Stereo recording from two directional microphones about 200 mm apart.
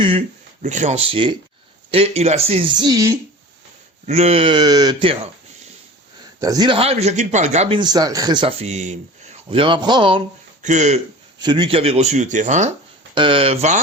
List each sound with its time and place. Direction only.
0.0 s speech: 30° right (ahead or behind)
4.0 s speech: 30° right (ahead or behind)
6.4 s speech: 20° right (ahead or behind); by 11.0 s 35° right (ahead or behind)
11.3 s speech: 25° right (ahead or behind)
13.1 s speech: 25° right (ahead or behind)